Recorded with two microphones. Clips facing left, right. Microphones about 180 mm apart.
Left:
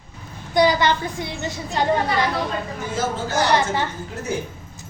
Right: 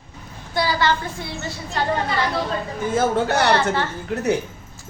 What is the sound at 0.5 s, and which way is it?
Speech, 20° left (ahead or behind).